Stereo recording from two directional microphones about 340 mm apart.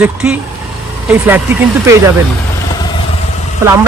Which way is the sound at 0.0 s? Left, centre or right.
Centre.